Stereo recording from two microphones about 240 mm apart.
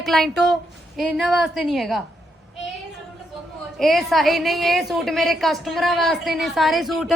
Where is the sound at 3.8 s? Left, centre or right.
Centre.